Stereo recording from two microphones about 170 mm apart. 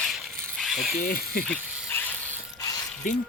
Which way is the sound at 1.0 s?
60° left (ahead or behind).